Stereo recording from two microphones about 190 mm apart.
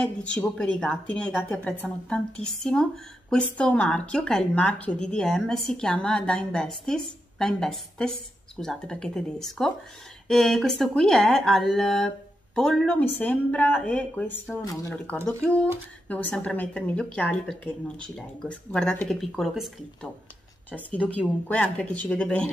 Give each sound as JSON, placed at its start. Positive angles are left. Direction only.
{"t": 0.0, "sound": "a woman's voice", "side_deg": 5}
{"t": 15.2, "sound": "a woman's voice", "side_deg": 5}